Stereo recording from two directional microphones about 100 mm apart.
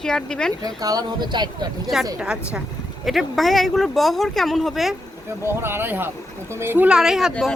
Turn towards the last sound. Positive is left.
turn(degrees=-5)  # may be behind; listen again after turning